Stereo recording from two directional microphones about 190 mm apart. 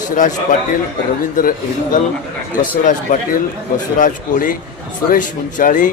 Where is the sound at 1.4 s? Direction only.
45° left (ahead or behind).